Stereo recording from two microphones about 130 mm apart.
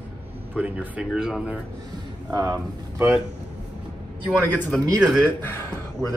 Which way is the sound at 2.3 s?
30° right (ahead or behind).